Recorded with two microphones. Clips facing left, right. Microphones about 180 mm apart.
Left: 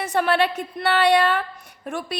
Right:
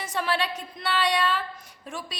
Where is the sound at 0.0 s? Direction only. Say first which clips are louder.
Left 7 dB; 60° left (ahead or behind).